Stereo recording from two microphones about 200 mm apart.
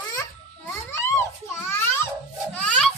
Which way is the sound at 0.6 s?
15° left (ahead or behind).